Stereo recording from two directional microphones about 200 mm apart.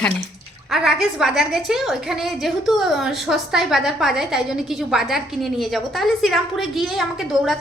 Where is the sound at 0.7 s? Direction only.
Centre (ahead or behind).